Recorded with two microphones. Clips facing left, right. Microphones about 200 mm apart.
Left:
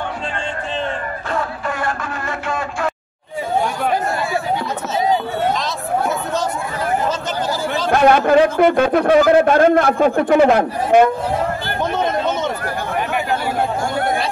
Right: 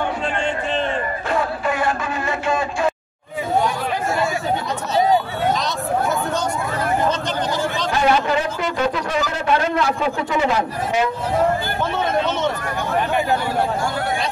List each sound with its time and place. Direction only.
1.3 s music: 15° right (ahead or behind)
7.9 s a man's voice: 55° left (ahead or behind)